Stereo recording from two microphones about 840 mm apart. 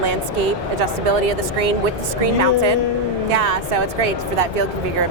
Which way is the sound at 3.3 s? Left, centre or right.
Right.